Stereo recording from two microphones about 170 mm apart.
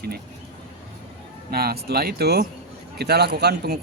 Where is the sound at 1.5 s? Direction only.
65° right (ahead or behind).